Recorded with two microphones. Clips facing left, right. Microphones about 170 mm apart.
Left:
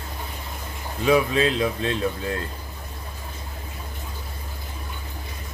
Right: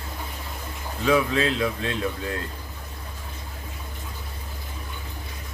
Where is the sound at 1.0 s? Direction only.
15° left (ahead or behind).